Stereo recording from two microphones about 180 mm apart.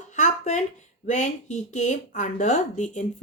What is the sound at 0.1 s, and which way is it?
Speech, 40° left (ahead or behind).